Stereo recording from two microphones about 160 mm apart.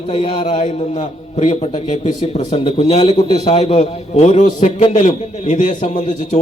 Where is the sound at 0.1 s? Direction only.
35° left (ahead or behind).